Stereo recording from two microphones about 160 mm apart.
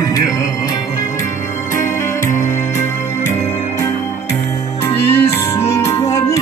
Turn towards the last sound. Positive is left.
turn(degrees=20)  # may be behind; listen again after turning